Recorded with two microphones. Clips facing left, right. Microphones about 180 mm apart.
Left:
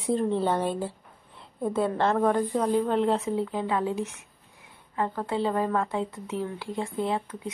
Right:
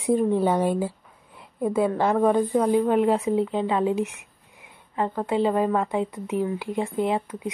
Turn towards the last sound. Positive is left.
turn(degrees=-15)  # may be behind; listen again after turning